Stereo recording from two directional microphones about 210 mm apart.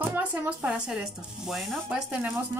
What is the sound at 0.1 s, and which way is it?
Speech, 10° right (ahead or behind).